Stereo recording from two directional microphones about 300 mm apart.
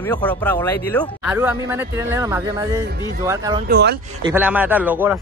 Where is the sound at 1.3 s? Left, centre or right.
Centre.